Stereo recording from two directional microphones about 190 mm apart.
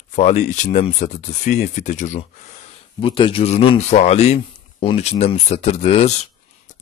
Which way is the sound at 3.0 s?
25° left (ahead or behind).